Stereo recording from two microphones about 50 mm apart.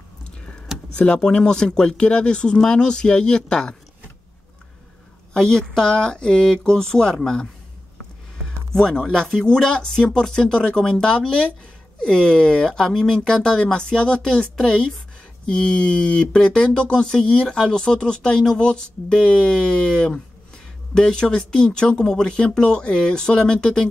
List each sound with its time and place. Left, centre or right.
0.4 s a sound: centre
0.9 s speech: left
5.3 s speech: centre
8.7 s speech: centre